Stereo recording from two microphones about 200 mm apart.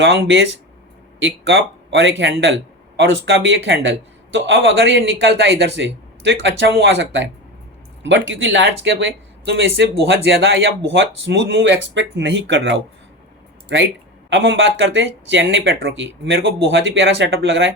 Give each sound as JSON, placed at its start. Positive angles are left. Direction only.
{"t": 0.0, "sound": "speech", "side_deg": -65}
{"t": 14.3, "sound": "speech", "side_deg": -65}